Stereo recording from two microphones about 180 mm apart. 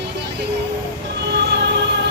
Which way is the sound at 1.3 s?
75° right (ahead or behind).